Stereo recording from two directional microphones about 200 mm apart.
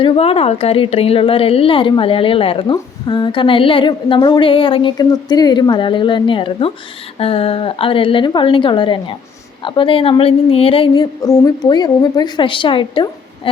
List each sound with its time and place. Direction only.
0.0 s a woman's voice: 30° left (ahead or behind)